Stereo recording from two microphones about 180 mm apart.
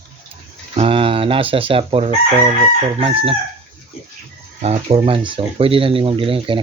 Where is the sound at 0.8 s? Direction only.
30° right (ahead or behind).